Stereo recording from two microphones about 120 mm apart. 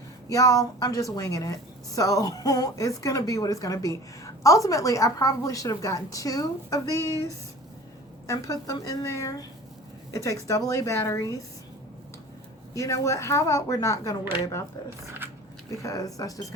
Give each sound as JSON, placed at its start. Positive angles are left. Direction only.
{"t": 0.3, "sound": "a woman's voice", "side_deg": 30}
{"t": 12.7, "sound": "a woman's voice", "side_deg": 25}
{"t": 15.7, "sound": "a woman's voice", "side_deg": 25}